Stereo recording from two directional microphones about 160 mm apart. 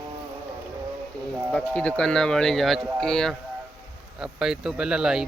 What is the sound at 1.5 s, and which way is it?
Speech, 10° left (ahead or behind).